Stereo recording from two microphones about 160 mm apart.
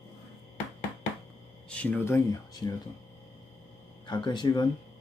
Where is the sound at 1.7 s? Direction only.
10° left (ahead or behind).